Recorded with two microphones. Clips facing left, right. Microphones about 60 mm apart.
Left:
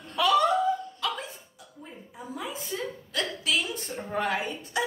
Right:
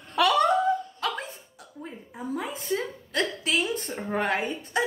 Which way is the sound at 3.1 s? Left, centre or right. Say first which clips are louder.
Right 3 dB; right.